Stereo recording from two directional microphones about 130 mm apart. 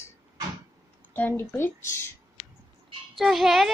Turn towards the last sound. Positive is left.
turn(degrees=0)  # may be behind; listen again after turning